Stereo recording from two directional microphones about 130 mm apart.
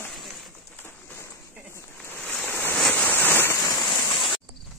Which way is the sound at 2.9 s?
15° left (ahead or behind).